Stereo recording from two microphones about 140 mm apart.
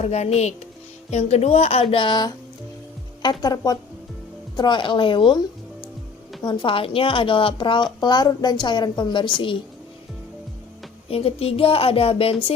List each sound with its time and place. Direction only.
0.0 s a woman's voice: 50° left (ahead or behind)
6.4 s a woman's voice: 30° left (ahead or behind)
11.1 s speech: 45° left (ahead or behind)